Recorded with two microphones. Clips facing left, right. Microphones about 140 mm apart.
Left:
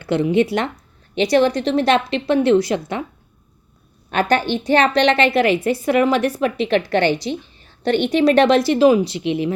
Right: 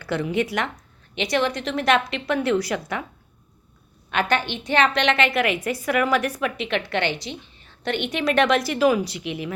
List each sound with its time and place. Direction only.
0.0 s a woman's voice: 25° left (ahead or behind)
4.1 s a woman's voice: 35° left (ahead or behind)